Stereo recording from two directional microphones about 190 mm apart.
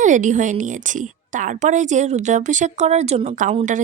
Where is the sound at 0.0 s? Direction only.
40° right (ahead or behind).